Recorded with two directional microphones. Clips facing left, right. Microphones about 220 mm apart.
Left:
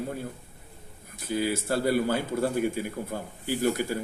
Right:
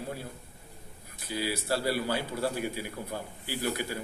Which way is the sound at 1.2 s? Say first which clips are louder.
Left 4 dB; 50° left (ahead or behind).